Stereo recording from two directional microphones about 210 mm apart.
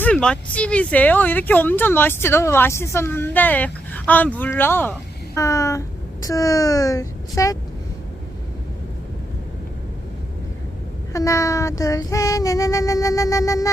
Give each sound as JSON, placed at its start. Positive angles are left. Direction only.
{"t": 0.0, "sound": "speech", "side_deg": 5}
{"t": 11.1, "sound": "speech", "side_deg": 15}